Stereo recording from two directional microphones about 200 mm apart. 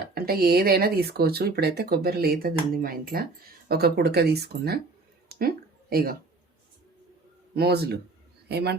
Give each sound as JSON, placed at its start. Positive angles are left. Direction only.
{"t": 0.1, "sound": "speech", "side_deg": -50}
{"t": 5.3, "sound": "a sound", "side_deg": -50}
{"t": 7.5, "sound": "speech", "side_deg": -50}